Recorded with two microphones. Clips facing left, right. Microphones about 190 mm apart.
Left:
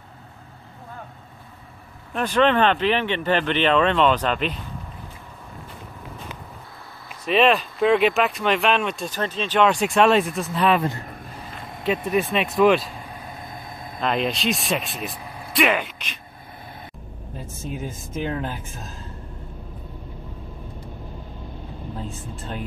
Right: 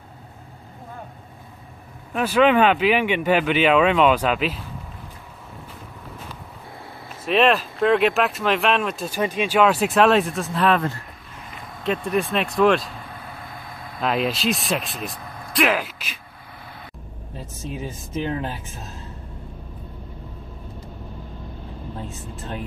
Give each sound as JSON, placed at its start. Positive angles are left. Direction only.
{"t": 2.1, "sound": "speech", "side_deg": -5}
{"t": 7.2, "sound": "speech", "side_deg": 0}
{"t": 10.8, "sound": "speech", "side_deg": 20}
{"t": 12.1, "sound": "speech", "side_deg": 0}
{"t": 13.0, "sound": "vehicle", "side_deg": 15}
{"t": 13.9, "sound": "speech", "side_deg": -5}
{"t": 17.6, "sound": "speech", "side_deg": 0}